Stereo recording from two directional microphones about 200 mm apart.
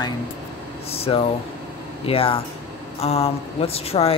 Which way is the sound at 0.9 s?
30° left (ahead or behind).